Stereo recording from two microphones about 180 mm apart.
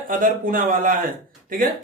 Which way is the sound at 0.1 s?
50° right (ahead or behind).